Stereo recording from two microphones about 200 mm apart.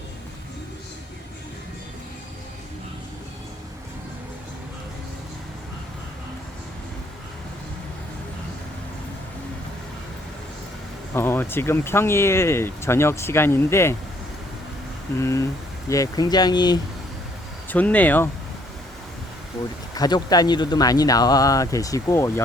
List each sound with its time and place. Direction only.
11.1 s speech: 10° left (ahead or behind)
15.2 s speech: 15° left (ahead or behind)
17.7 s speech: 10° left (ahead or behind)
20.0 s speech: 20° left (ahead or behind)